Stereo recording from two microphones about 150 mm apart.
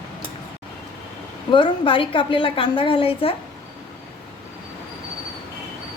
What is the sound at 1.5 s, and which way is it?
A woman's voice, 35° left (ahead or behind).